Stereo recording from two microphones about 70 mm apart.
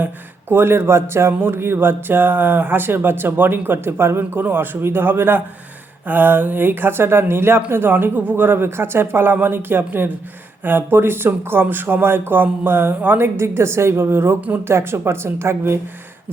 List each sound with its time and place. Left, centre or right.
0.5 s speech: right